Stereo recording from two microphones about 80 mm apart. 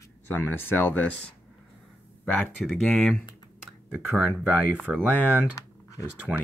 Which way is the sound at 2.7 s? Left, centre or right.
Centre.